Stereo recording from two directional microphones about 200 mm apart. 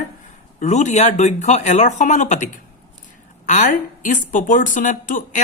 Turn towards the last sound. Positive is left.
turn(degrees=40)  # may be behind; listen again after turning